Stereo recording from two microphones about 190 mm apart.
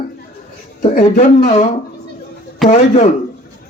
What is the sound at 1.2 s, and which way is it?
A man's voice, 40° left (ahead or behind).